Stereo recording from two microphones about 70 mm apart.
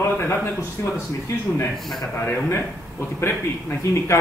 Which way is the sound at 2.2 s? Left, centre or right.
Left.